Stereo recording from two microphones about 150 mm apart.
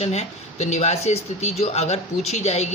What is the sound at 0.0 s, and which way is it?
Speech, 45° left (ahead or behind).